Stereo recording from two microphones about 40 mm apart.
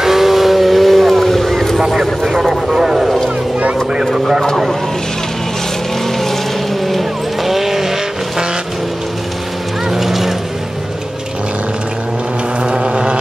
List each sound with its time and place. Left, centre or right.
0.0 s vehicle: centre
2.0 s vehicle: centre
4.0 s a sound: centre
6.8 s vehicle: centre
9.8 s vehicle: centre
12.6 s vehicle: right